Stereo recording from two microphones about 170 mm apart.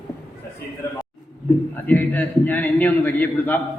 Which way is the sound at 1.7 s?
10° left (ahead or behind).